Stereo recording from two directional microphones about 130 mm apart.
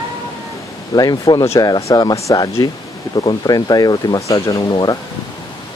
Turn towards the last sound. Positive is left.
turn(degrees=35)  # may be behind; listen again after turning